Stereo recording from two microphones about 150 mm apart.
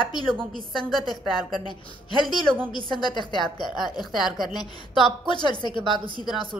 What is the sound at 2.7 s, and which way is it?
Speech, 30° left (ahead or behind).